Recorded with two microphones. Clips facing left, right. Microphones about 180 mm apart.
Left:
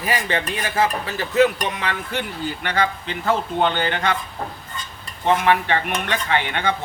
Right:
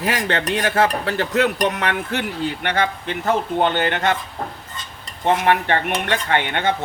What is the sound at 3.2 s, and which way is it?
Dishes, 50° right (ahead or behind).